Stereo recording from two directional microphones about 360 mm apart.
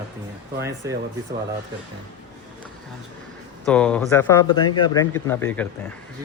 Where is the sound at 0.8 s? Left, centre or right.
Centre.